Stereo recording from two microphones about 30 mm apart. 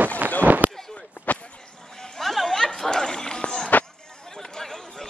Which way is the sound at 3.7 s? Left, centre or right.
Left.